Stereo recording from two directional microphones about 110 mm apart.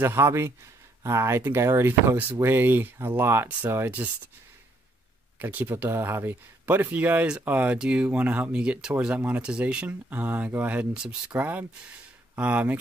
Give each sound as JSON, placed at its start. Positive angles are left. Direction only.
{"t": 0.0, "sound": "speech", "side_deg": -25}
{"t": 5.4, "sound": "speech", "side_deg": -15}